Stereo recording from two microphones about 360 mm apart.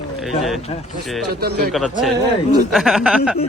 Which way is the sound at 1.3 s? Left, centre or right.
Right.